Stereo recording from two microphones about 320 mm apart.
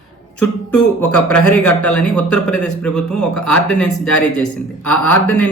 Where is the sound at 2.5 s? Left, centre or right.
Left.